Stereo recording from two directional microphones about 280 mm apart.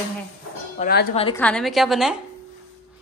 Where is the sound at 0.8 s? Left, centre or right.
Left.